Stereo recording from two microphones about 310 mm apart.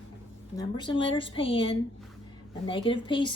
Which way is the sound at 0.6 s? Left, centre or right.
Centre.